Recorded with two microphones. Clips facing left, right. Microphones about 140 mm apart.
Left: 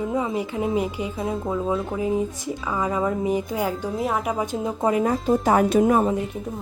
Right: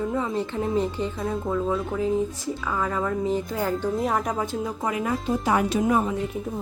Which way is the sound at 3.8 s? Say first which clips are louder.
Even; centre (ahead or behind).